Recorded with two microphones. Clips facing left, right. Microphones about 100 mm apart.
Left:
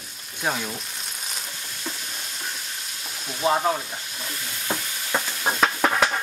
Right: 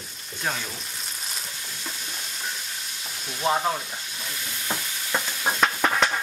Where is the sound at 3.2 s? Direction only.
5° left (ahead or behind).